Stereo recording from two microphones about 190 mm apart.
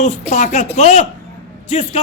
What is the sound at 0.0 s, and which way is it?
A man's voice, 40° left (ahead or behind).